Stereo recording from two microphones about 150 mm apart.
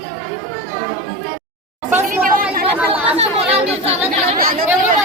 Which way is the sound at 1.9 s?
65° right (ahead or behind).